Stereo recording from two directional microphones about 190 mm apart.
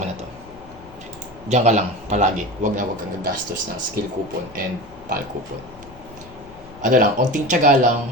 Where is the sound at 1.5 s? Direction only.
40° right (ahead or behind).